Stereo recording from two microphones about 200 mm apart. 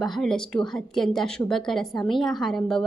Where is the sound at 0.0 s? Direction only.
Centre (ahead or behind).